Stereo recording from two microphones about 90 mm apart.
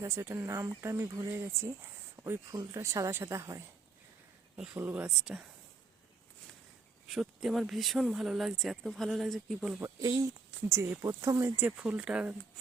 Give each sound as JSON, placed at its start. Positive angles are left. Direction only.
{"t": 0.0, "sound": "speech", "side_deg": -30}
{"t": 4.5, "sound": "speech", "side_deg": -15}
{"t": 7.1, "sound": "speech", "side_deg": -5}
{"t": 10.0, "sound": "speech", "side_deg": -40}
{"t": 11.6, "sound": "speech", "side_deg": -15}